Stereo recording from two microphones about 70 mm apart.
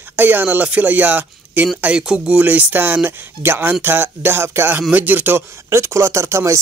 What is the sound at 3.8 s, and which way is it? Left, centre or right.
Speech, right.